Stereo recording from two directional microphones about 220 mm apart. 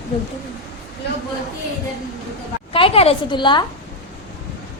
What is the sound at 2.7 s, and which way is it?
Speech, 25° left (ahead or behind).